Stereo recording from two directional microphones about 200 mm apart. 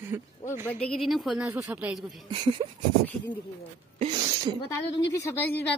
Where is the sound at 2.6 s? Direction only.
20° right (ahead or behind).